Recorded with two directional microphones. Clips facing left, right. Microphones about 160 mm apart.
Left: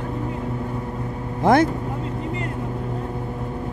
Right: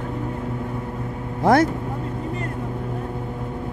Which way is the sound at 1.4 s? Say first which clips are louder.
Even; 20° left (ahead or behind).